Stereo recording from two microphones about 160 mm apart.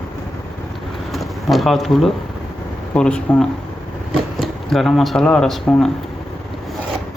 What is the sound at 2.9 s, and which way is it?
Speech, 5° left (ahead or behind).